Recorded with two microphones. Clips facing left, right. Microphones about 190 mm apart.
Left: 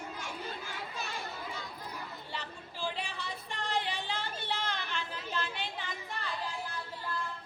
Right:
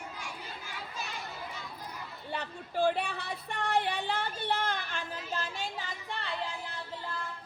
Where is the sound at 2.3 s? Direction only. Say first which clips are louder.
Right 5 dB; 55° right (ahead or behind).